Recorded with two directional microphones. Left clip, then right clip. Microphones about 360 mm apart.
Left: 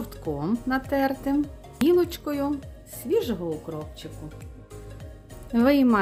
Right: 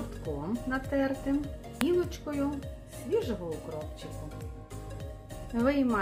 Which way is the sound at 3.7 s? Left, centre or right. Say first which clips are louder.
Left 4 dB; left.